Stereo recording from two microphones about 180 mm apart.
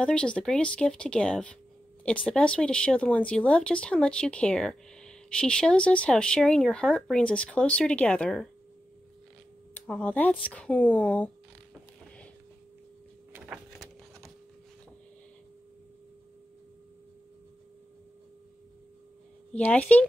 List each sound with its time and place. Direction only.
0.0 s speech: 5° left (ahead or behind)
9.8 s speech: 10° left (ahead or behind)
13.3 s power windows: 5° right (ahead or behind)
19.5 s speech: 10° left (ahead or behind)